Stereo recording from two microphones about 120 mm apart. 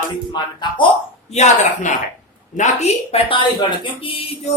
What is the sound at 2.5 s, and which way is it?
Speech, 70° left (ahead or behind).